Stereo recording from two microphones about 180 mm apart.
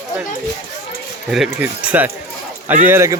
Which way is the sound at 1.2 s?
Centre (ahead or behind).